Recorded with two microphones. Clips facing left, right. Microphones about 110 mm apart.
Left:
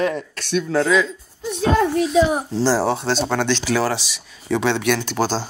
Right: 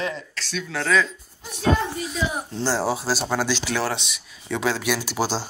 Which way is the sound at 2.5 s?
5° left (ahead or behind).